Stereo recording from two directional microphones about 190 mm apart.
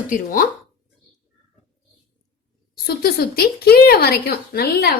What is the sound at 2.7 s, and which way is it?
Speech, 55° left (ahead or behind).